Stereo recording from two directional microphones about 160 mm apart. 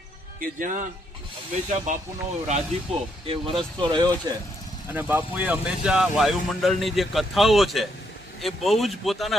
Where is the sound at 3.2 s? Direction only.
35° right (ahead or behind).